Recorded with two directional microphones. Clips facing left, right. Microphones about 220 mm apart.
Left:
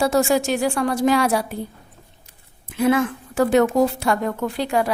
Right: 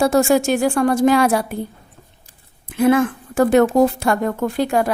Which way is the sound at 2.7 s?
50° right (ahead or behind).